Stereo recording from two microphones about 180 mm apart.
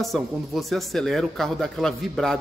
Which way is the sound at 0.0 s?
Centre (ahead or behind).